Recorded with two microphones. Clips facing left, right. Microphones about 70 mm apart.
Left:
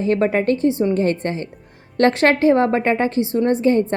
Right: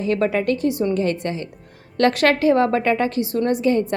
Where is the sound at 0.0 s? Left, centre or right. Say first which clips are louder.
Left 2 dB; left.